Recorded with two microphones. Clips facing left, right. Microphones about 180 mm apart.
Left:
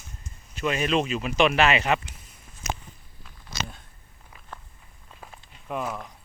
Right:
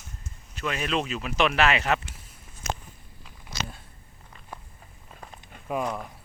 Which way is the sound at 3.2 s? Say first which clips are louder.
Even; 5° right (ahead or behind).